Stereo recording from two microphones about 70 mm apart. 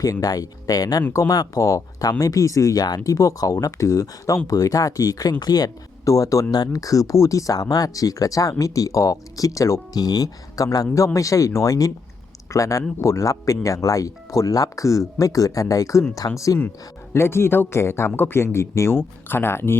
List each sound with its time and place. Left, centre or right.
0.0 s speech: left
2.8 s speech: left
9.9 s speech: left
17.2 s speech: left